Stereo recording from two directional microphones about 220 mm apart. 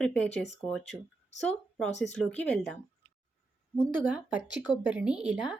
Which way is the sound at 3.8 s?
5° right (ahead or behind).